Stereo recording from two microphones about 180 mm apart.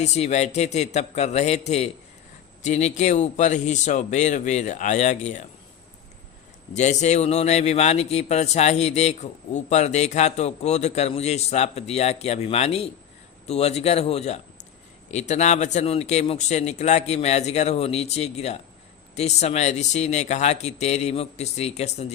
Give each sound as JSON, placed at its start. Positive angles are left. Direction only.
{"t": 0.0, "sound": "speech", "side_deg": 40}
{"t": 6.7, "sound": "speech", "side_deg": 40}